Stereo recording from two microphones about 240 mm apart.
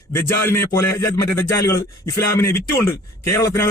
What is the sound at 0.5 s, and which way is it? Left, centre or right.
A man's voice, centre.